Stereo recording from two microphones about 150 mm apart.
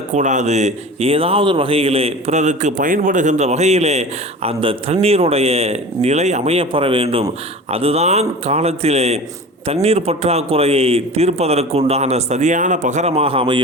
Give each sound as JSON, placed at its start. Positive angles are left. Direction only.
{"t": 0.1, "sound": "a man's voice", "side_deg": -55}